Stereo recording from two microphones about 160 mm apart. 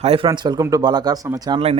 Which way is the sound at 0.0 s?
35° right (ahead or behind).